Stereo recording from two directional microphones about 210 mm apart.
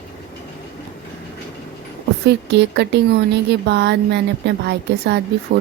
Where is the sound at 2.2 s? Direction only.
55° right (ahead or behind).